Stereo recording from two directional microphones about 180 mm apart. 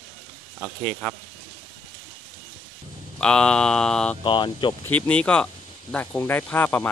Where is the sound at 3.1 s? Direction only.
5° left (ahead or behind).